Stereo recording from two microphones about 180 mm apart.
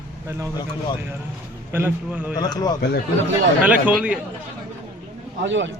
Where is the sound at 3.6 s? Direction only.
10° right (ahead or behind).